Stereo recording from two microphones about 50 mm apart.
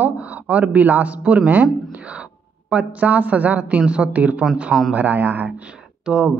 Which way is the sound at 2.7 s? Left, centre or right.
Right.